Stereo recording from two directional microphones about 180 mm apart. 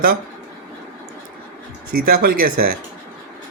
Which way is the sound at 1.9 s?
55° right (ahead or behind).